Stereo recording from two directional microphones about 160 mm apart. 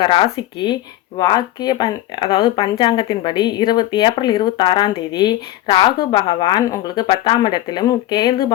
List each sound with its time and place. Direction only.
0.0 s speech: 30° left (ahead or behind)